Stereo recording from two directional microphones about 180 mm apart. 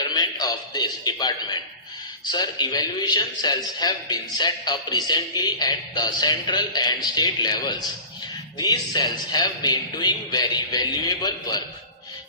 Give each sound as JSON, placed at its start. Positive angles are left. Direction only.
{"t": 0.0, "sound": "a man's voice", "side_deg": 25}